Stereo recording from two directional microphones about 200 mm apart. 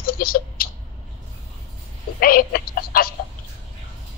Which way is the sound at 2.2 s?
45° left (ahead or behind).